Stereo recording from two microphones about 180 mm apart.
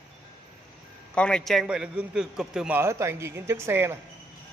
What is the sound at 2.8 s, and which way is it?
Speech, 15° right (ahead or behind).